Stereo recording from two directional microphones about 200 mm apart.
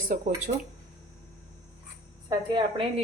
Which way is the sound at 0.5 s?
40° right (ahead or behind).